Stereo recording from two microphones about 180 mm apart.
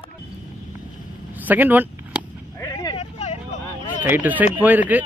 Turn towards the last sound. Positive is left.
turn(degrees=-10)  # may be behind; listen again after turning